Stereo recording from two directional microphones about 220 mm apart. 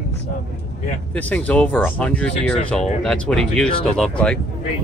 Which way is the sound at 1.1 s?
5° left (ahead or behind).